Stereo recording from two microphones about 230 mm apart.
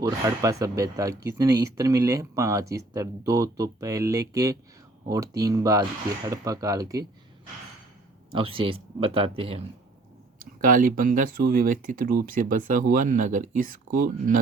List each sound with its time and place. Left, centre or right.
0.0 s speech: centre
8.3 s speech: right
10.6 s speech: right